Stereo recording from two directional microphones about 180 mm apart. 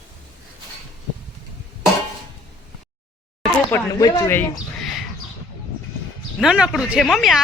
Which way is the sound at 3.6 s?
20° left (ahead or behind).